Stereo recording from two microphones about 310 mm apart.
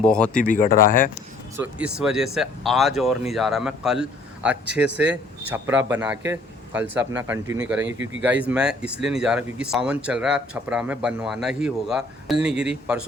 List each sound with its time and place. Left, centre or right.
0.0 s speech: centre
0.4 s speech: left
1.1 s speech: centre
7.8 s speech: right
8.2 s speech: centre